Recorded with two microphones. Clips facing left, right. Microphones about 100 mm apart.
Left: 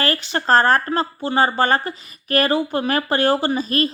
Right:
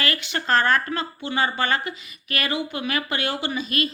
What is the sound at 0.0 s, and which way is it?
Speech, 35° left (ahead or behind).